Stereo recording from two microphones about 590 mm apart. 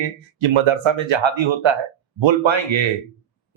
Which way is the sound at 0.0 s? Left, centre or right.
Right.